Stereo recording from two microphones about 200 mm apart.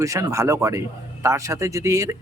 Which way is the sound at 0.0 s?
15° right (ahead or behind).